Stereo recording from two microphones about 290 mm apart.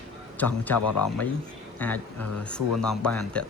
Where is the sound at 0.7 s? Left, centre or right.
Left.